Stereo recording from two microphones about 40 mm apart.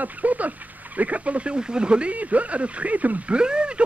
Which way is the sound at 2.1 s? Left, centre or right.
Right.